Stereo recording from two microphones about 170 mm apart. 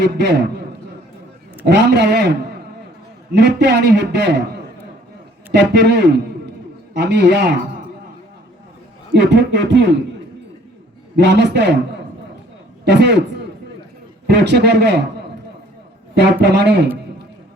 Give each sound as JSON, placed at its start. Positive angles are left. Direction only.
{"t": 0.0, "sound": "a man's voice", "side_deg": -80}
{"t": 1.6, "sound": "a man's voice", "side_deg": -85}
{"t": 9.1, "sound": "a man's voice", "side_deg": -90}
{"t": 11.2, "sound": "a man's voice", "side_deg": -85}
{"t": 12.8, "sound": "a man's voice", "side_deg": -80}
{"t": 14.3, "sound": "a man's voice", "side_deg": -80}
{"t": 16.1, "sound": "a man's voice", "side_deg": -75}